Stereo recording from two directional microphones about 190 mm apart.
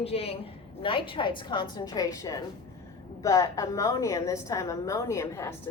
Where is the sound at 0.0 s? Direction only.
30° left (ahead or behind).